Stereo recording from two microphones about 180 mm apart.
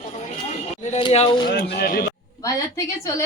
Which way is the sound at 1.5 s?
60° left (ahead or behind).